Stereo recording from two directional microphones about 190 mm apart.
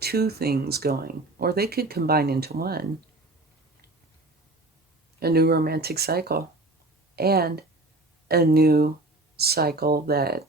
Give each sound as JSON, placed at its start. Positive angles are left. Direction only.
{"t": 0.0, "sound": "speech", "side_deg": -55}
{"t": 5.2, "sound": "speech", "side_deg": -55}